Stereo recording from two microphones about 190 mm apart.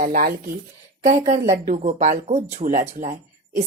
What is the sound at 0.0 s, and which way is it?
Speech, 45° right (ahead or behind).